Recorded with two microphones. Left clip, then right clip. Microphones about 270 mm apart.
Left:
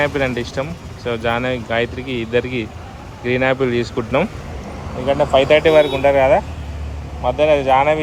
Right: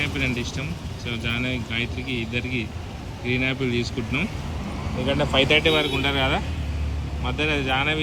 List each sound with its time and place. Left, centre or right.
0.0 s speech: centre
5.0 s speech: left
5.4 s speech: centre
7.3 s speech: centre